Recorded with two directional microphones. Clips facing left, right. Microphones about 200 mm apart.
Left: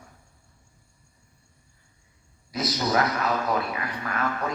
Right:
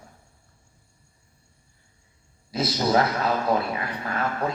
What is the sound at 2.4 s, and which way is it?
Speech, 30° right (ahead or behind).